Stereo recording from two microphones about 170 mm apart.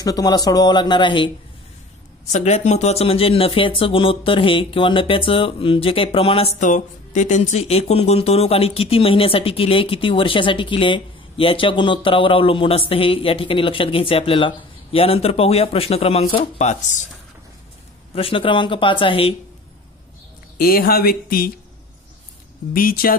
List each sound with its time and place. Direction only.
0.0 s speech: 25° left (ahead or behind)
2.3 s speech: 45° left (ahead or behind)
18.1 s speech: 30° left (ahead or behind)
20.5 s speech: 60° left (ahead or behind)
22.8 s speech: 60° left (ahead or behind)